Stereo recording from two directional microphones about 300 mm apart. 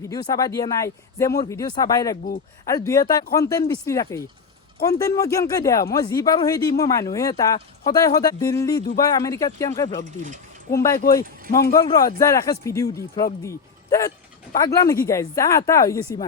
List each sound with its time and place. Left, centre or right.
0.1 s speech: centre
11.0 s speech: left
11.8 s a man's voice: centre